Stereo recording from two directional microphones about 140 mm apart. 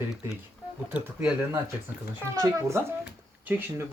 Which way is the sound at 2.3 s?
20° right (ahead or behind).